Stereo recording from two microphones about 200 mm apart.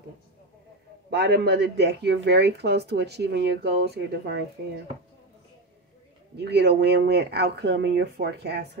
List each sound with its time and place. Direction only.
1.1 s speech: 55° right (ahead or behind)
6.3 s speech: 55° right (ahead or behind)